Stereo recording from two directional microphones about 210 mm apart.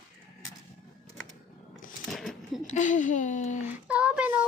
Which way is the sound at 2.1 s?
Centre (ahead or behind).